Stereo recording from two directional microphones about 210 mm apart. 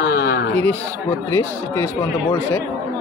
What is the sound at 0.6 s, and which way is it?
Speech, 10° left (ahead or behind).